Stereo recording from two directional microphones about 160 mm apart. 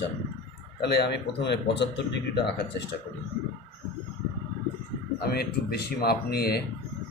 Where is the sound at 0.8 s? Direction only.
90° left.